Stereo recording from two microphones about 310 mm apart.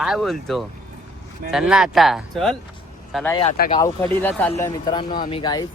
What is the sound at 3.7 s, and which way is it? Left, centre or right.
Speech, centre.